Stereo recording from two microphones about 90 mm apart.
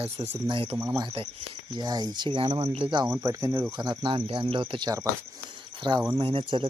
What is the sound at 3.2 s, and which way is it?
Speech, 35° right (ahead or behind).